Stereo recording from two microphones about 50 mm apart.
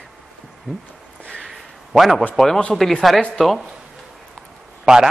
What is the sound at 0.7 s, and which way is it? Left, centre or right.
Speech, centre.